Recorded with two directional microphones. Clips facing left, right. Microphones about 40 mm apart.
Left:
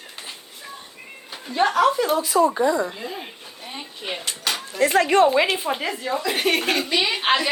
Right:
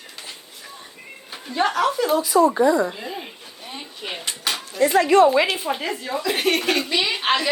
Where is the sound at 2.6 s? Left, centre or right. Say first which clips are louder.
Right 3 dB; right.